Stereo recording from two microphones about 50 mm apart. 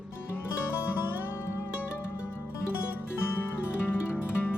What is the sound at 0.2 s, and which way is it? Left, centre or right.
Music, left.